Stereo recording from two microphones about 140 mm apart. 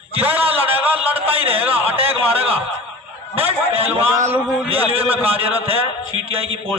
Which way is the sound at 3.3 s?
45° right (ahead or behind).